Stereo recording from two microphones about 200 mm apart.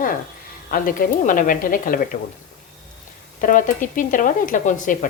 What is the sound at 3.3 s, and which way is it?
Speech, 40° left (ahead or behind).